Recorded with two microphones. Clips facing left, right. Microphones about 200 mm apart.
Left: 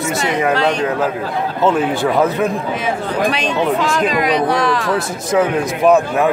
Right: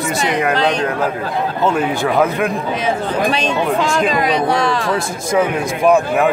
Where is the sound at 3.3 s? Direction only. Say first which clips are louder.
Even; 25° right (ahead or behind).